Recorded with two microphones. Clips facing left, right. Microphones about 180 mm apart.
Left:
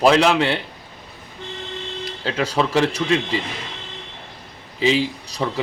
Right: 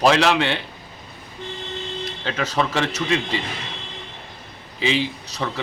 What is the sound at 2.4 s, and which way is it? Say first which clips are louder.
Speech: left 2 dB; 10° left (ahead or behind).